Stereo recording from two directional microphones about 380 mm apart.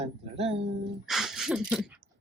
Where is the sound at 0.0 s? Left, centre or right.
Centre.